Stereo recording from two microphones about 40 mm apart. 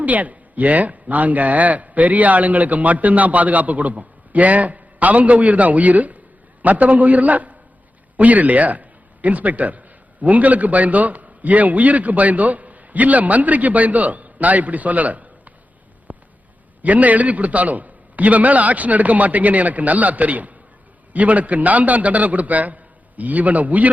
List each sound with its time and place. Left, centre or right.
0.0 s a man's voice: right
16.1 s a sound: right
16.8 s speech: right